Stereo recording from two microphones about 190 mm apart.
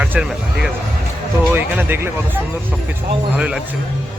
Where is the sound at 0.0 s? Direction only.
5° right (ahead or behind).